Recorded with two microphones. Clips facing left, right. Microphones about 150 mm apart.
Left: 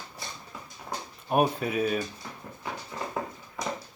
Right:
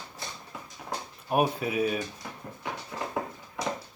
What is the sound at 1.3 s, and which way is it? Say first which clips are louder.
Speech: left 1 dB; 5° right (ahead or behind).